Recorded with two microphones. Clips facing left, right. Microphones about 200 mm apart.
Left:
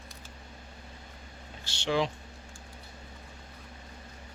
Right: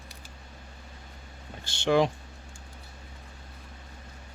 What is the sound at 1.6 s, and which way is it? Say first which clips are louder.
Speech: right 6 dB; 55° right (ahead or behind).